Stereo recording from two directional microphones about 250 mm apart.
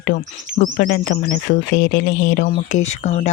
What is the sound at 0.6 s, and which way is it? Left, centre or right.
Speech, left.